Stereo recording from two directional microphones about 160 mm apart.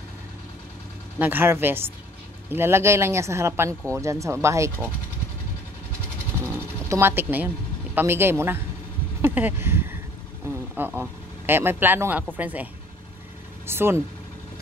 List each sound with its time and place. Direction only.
1.2 s speech: 15° right (ahead or behind)
6.9 s speech: 15° right (ahead or behind)
9.2 s a sound: 10° right (ahead or behind)
10.8 s speech: 10° right (ahead or behind)
13.7 s speech: 15° right (ahead or behind)